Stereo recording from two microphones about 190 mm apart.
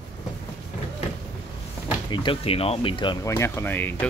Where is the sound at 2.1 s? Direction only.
25° left (ahead or behind); by 4.1 s 10° left (ahead or behind).